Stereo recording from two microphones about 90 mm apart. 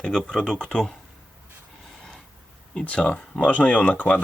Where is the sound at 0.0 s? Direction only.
5° left (ahead or behind).